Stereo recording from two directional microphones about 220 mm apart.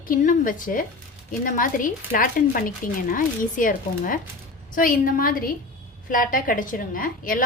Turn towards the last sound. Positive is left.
turn(degrees=40)  # may be behind; listen again after turning